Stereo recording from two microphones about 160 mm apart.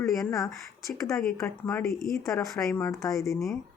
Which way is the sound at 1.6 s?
5° left (ahead or behind).